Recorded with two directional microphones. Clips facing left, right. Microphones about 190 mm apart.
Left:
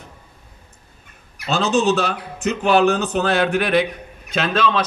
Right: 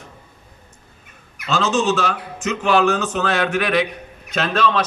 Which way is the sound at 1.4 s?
35° left (ahead or behind).